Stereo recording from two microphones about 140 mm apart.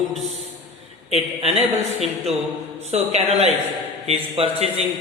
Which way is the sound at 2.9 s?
50° right (ahead or behind).